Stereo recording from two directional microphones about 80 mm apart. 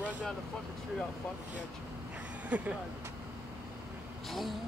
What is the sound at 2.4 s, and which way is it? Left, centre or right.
Speech, centre.